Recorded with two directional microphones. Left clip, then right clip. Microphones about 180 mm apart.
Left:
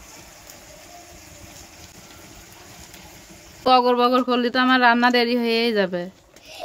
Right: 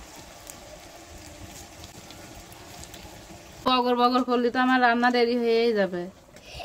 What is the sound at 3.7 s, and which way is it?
Speech, 35° left (ahead or behind).